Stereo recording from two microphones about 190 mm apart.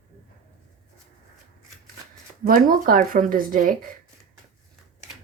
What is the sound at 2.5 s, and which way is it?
Speech, 50° right (ahead or behind).